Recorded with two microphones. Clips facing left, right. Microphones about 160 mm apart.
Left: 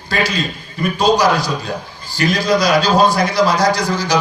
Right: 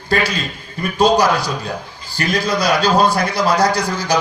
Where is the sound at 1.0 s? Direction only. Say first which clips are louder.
Right 1 dB; 55° right (ahead or behind).